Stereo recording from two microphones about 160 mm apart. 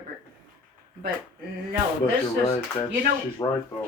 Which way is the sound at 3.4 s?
20° left (ahead or behind).